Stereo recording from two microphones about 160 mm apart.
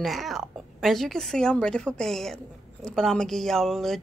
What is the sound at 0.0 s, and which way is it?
A woman's voice, centre (ahead or behind).